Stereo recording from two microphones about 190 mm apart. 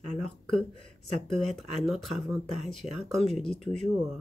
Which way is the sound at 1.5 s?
Centre (ahead or behind).